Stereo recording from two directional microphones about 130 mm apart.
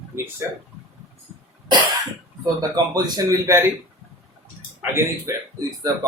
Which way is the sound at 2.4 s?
30° right (ahead or behind).